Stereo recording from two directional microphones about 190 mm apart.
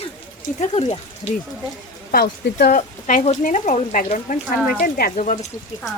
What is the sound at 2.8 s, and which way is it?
Speech, 40° left (ahead or behind).